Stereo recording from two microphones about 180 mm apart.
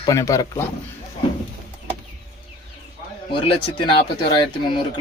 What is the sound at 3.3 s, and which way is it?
Speech, 30° left (ahead or behind).